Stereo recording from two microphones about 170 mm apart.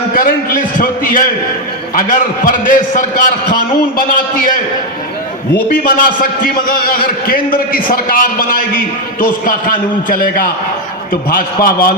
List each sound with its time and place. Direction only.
0.1 s a man's voice: 55° left (ahead or behind)
5.6 s a man's voice: 55° left (ahead or behind)